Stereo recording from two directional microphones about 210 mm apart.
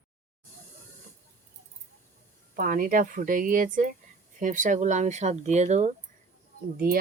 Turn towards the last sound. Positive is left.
turn(degrees=-45)  # may be behind; listen again after turning